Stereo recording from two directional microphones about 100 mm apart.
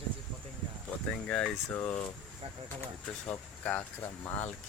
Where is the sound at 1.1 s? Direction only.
10° left (ahead or behind).